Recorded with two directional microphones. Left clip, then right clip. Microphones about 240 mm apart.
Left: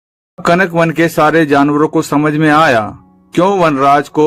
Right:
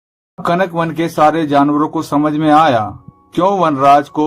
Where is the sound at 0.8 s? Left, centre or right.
Left.